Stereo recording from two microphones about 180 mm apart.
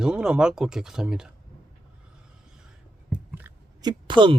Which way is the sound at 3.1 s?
10° right (ahead or behind).